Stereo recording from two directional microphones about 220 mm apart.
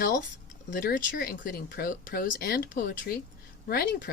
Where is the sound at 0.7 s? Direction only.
40° left (ahead or behind).